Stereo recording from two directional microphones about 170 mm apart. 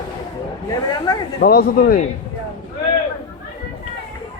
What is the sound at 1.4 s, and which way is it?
Speech, 65° left (ahead or behind).